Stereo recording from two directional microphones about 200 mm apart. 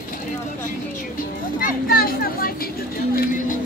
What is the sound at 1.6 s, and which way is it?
Speech, 45° left (ahead or behind).